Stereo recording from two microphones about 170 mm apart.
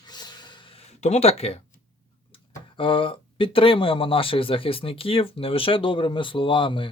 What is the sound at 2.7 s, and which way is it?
Speech, 30° left (ahead or behind).